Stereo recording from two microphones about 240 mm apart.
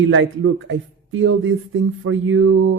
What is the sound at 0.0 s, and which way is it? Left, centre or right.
Speech, right.